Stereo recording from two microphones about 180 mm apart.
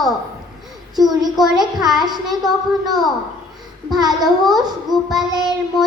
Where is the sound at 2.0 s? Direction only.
20° right (ahead or behind).